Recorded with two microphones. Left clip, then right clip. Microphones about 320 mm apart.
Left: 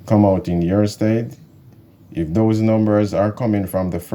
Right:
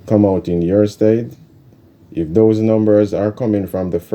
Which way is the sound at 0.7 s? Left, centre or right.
Centre.